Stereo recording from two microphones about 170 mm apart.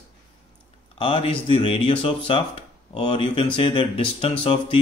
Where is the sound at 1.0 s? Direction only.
30° left (ahead or behind).